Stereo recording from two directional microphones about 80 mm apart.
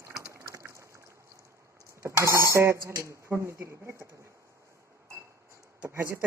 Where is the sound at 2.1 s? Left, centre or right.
Right.